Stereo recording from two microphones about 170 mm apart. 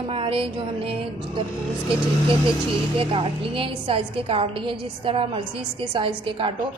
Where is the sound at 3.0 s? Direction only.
30° right (ahead or behind).